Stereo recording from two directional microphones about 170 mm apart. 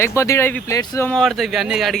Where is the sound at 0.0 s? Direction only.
15° left (ahead or behind).